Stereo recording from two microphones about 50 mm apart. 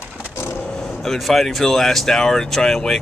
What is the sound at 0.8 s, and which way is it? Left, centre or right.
Speech, centre.